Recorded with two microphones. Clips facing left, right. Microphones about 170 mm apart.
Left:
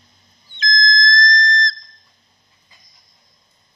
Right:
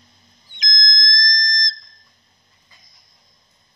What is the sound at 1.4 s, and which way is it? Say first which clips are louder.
Whistle: left 8 dB; 15° right (ahead or behind).